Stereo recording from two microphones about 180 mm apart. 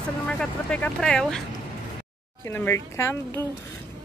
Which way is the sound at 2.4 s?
15° left (ahead or behind).